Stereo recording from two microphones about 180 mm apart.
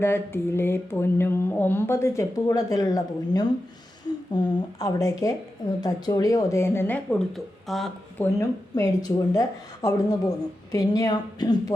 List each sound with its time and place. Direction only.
0.0 s speech: 15° left (ahead or behind)
8.2 s speech: 15° left (ahead or behind)